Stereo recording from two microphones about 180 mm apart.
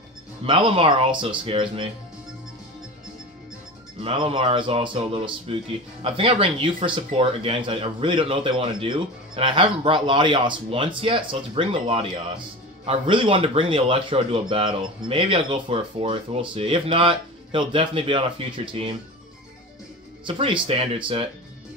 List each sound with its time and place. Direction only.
0.5 s speech: 30° right (ahead or behind)
4.0 s speech: 30° right (ahead or behind)
20.2 s speech: 30° right (ahead or behind)